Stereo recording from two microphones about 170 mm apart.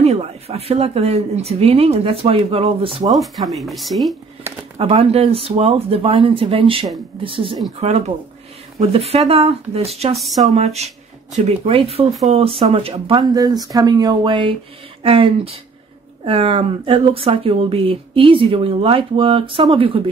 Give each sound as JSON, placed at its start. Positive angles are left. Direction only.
{"t": 0.0, "sound": "speech", "side_deg": -35}
{"t": 3.1, "sound": "speech", "side_deg": 0}
{"t": 4.7, "sound": "speech", "side_deg": -35}
{"t": 8.7, "sound": "speech", "side_deg": -35}
{"t": 10.1, "sound": "speech", "side_deg": 0}
{"t": 10.5, "sound": "speech", "side_deg": -40}